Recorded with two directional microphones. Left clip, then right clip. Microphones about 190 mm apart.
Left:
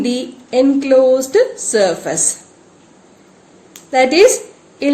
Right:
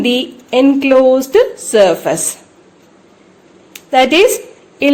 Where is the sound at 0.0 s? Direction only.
30° right (ahead or behind).